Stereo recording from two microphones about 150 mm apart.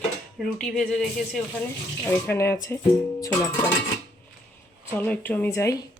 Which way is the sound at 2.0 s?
15° left (ahead or behind).